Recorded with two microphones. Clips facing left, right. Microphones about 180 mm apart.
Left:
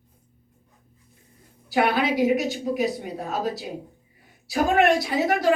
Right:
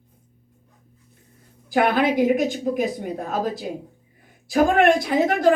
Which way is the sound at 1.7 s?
50° right (ahead or behind).